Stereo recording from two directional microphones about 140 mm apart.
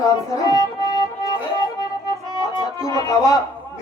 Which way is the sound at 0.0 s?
25° left (ahead or behind).